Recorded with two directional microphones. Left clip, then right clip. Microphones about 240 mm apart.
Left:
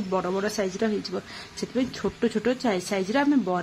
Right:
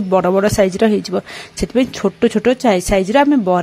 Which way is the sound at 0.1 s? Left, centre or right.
Right.